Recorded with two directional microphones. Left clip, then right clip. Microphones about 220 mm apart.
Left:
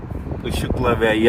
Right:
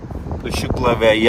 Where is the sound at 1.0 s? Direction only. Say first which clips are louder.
Right 5 dB; 40° right (ahead or behind).